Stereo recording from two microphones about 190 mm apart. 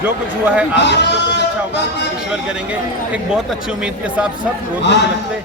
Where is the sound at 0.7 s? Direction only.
65° left (ahead or behind).